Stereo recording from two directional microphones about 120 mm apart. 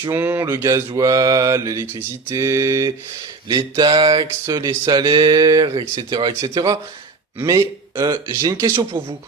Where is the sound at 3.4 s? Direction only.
40° right (ahead or behind).